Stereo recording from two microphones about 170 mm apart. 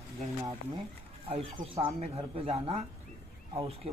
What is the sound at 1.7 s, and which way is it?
Speech, 35° right (ahead or behind).